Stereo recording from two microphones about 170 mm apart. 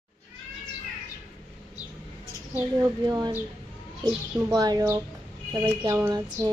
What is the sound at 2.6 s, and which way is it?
Speech, 20° right (ahead or behind).